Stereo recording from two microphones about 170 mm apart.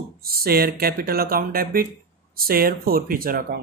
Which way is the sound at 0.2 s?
65° right (ahead or behind).